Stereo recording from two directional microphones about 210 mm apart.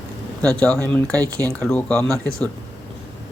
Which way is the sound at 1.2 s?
15° right (ahead or behind).